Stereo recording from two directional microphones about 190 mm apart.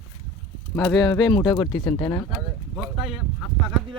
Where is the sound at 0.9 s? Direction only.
20° left (ahead or behind).